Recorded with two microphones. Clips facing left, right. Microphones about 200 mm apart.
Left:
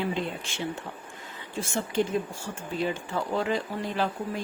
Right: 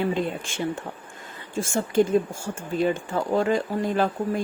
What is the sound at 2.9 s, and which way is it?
Speech, 45° right (ahead or behind).